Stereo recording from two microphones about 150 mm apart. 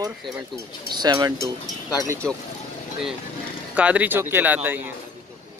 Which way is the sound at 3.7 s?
10° right (ahead or behind).